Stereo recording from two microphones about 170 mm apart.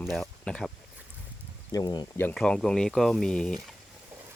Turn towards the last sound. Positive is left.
turn(degrees=5)  # may be behind; listen again after turning